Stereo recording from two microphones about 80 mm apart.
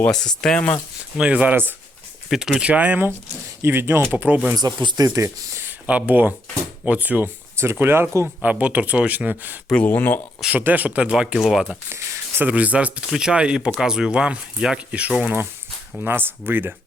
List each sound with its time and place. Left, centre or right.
0.1 s speech: centre
1.1 s speech: centre
2.3 s speech: centre
3.6 s speech: right
4.5 s speech: right
5.6 s speech: centre
8.4 s speech: centre
9.8 s speech: left
10.5 s speech: right; by 11.7 s centre
11.7 s a sound: right
12.4 s speech: centre
16.0 s speech: right